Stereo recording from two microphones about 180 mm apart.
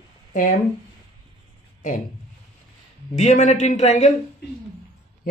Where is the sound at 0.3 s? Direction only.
45° left (ahead or behind).